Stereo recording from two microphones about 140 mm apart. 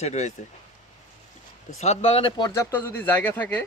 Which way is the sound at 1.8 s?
50° left (ahead or behind).